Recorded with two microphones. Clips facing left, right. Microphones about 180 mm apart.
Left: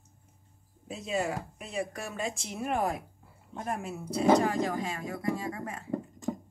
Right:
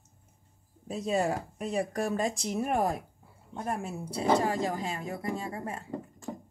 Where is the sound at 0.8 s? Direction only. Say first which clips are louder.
Right 3 dB; 40° right (ahead or behind).